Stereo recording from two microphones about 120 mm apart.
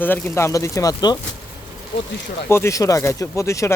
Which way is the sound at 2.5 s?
25° left (ahead or behind).